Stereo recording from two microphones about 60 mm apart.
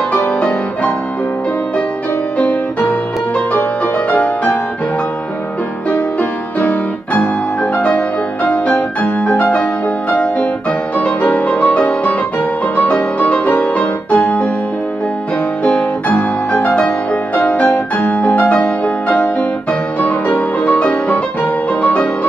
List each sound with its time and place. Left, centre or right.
2.3 s music: left
4.1 s music: left
7.7 s music: left
11.0 s music: centre
15.6 s music: left